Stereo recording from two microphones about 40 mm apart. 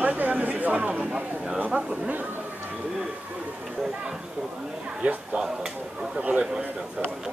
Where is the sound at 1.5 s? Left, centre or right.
Right.